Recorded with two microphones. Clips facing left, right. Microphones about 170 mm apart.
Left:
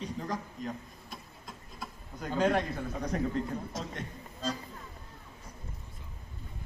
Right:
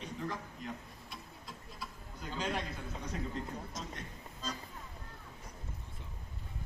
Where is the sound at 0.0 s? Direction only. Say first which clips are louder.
Left 4 dB; 40° left (ahead or behind); by 2.6 s 55° left (ahead or behind).